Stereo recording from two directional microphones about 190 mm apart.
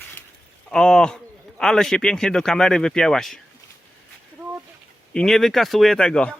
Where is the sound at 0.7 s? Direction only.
5° left (ahead or behind).